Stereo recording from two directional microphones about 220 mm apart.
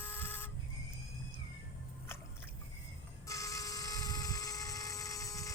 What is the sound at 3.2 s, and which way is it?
Vehicle, 15° left (ahead or behind).